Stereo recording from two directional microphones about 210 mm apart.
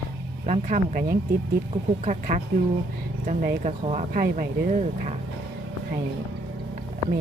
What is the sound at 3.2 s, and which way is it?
A woman's voice, 35° right (ahead or behind).